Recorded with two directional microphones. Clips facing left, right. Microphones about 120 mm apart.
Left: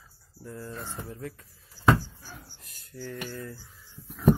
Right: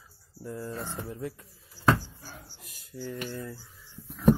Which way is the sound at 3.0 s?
20° right (ahead or behind).